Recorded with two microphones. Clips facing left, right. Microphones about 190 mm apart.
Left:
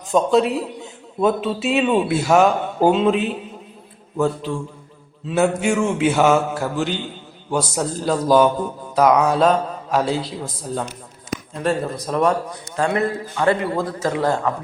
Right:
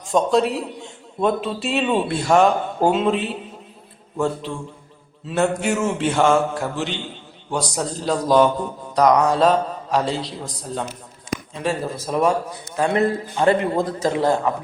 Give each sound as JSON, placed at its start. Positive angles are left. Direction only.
{"t": 0.1, "sound": "a man's voice", "side_deg": 0}
{"t": 5.3, "sound": "a man's voice", "side_deg": 0}
{"t": 12.7, "sound": "a man's voice", "side_deg": -20}